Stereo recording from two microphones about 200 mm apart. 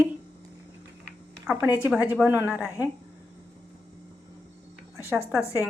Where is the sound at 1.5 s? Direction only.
10° right (ahead or behind).